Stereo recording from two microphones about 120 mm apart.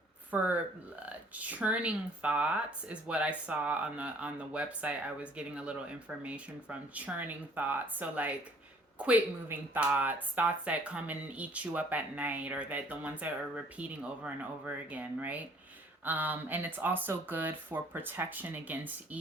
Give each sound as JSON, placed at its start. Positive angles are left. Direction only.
{"t": 0.3, "sound": "speech", "side_deg": -15}